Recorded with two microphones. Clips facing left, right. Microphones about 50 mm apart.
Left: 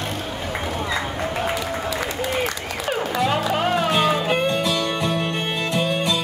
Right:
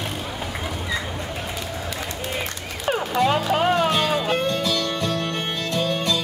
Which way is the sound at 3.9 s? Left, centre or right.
Centre.